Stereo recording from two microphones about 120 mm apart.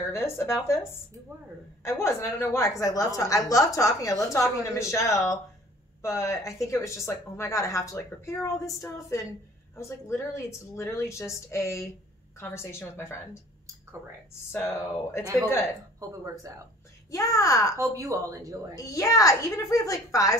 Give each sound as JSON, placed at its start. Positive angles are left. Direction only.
{"t": 0.1, "sound": "a woman's voice", "side_deg": 20}
{"t": 1.9, "sound": "a woman's voice", "side_deg": 25}
{"t": 14.5, "sound": "a woman's voice", "side_deg": 20}
{"t": 16.0, "sound": "speech", "side_deg": -30}
{"t": 17.1, "sound": "a woman's voice", "side_deg": 25}
{"t": 17.7, "sound": "speech", "side_deg": -30}
{"t": 18.8, "sound": "a woman's voice", "side_deg": 25}